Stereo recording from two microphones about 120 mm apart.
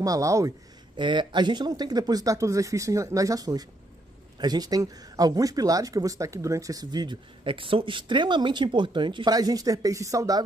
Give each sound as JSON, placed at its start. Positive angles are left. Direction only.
{"t": 0.0, "sound": "speech", "side_deg": -30}
{"t": 0.9, "sound": "speech", "side_deg": -40}